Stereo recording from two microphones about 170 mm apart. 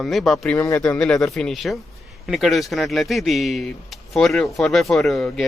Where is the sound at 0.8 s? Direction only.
5° left (ahead or behind).